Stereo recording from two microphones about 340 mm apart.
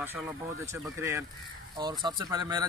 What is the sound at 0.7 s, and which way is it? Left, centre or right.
Speech, centre.